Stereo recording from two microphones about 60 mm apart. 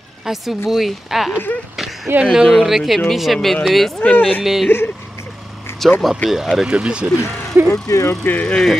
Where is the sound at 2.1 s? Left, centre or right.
Right.